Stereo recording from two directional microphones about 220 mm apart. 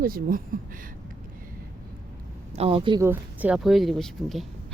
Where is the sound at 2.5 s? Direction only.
25° right (ahead or behind).